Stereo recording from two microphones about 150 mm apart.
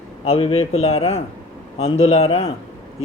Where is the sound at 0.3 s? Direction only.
40° left (ahead or behind).